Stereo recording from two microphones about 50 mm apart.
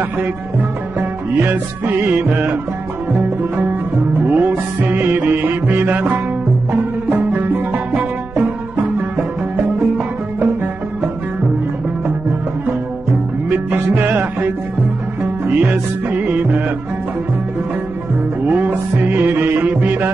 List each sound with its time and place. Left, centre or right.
0.2 s music: right
4.2 s music: right
13.5 s music: right
18.5 s music: right